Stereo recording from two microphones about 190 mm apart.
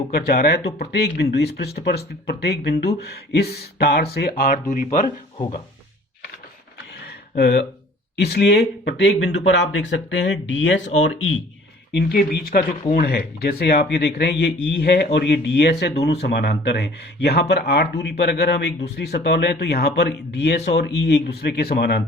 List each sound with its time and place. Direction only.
0.1 s speech: 55° left (ahead or behind)
5.0 s speech: 30° left (ahead or behind)
7.3 s speech: 55° left (ahead or behind)
11.0 s speech: 90° left
11.9 s speech: 55° left (ahead or behind)